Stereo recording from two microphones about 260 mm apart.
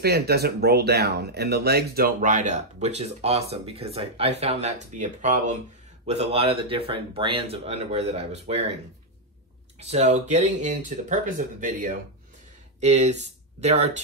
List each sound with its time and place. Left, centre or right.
0.0 s speech: right
9.8 s speech: right